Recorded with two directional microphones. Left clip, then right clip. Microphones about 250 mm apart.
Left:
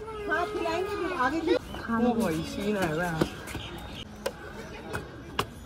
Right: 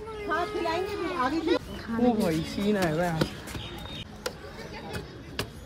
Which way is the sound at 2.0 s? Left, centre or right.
Right.